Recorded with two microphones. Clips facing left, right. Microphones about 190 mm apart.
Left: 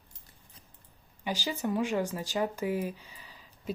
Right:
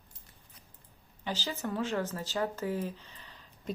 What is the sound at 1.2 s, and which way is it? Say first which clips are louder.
Speech: left 3 dB; 10° left (ahead or behind).